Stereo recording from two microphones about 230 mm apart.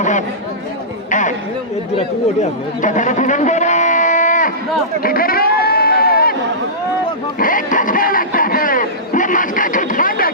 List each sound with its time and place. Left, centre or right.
0.0 s speech: left
2.8 s a sound: left
5.0 s sheep: left
7.3 s speech: left